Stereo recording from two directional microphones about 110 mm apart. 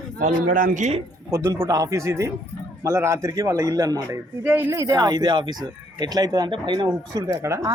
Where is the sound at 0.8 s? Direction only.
90° right.